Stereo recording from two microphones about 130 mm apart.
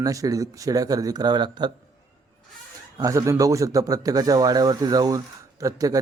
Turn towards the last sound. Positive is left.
turn(degrees=-25)  # may be behind; listen again after turning